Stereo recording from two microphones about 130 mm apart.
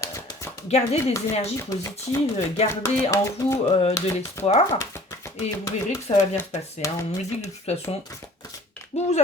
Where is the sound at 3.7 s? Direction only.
50° left (ahead or behind).